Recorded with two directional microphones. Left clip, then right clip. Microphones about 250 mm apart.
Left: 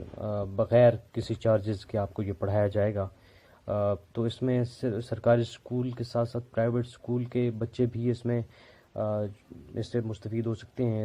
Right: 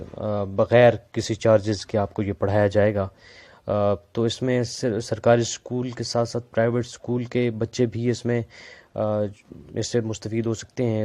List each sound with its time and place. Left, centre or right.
0.2 s speech: right